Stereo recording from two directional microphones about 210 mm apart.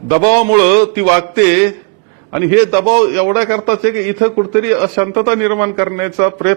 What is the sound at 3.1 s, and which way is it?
A man's voice, 15° right (ahead or behind).